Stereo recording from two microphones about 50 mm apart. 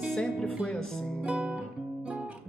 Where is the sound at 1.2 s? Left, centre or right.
Right.